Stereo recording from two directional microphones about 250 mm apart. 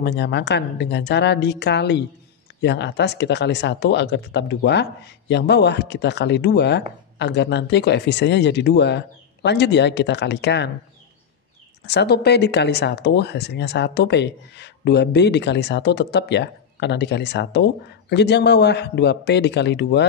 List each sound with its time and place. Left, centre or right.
0.0 s speech: left
11.8 s speech: left